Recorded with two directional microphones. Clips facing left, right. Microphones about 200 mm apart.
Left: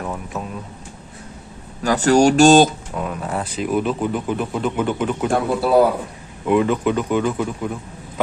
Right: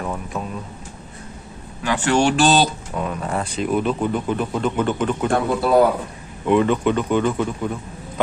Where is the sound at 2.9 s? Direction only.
Centre (ahead or behind).